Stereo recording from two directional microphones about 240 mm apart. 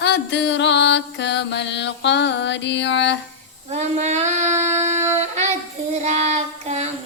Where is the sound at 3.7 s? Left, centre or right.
Right.